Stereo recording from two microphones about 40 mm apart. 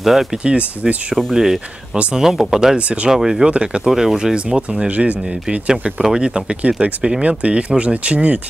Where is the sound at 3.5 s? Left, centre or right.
Right.